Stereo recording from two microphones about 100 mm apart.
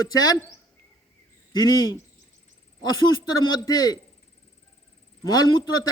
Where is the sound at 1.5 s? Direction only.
45° left (ahead or behind).